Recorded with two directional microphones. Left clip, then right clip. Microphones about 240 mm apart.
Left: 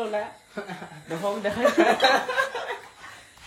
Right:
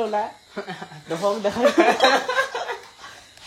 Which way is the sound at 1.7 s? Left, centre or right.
Right.